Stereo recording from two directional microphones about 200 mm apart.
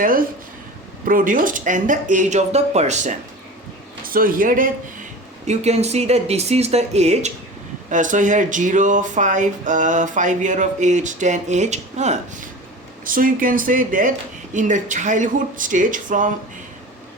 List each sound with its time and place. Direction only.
0.0 s speech: 45° right (ahead or behind)
5.5 s speech: 35° right (ahead or behind)